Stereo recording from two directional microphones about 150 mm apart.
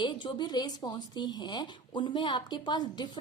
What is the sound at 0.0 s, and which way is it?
A woman's voice, 30° left (ahead or behind).